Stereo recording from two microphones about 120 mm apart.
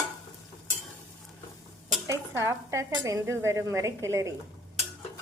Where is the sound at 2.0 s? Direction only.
25° right (ahead or behind).